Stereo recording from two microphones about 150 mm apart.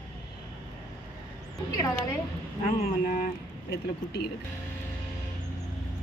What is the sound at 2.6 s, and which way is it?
Speech, 55° left (ahead or behind).